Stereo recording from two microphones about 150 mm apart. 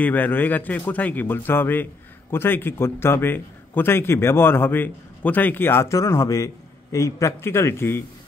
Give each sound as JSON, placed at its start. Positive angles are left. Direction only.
{"t": 0.0, "sound": "a man's voice", "side_deg": 10}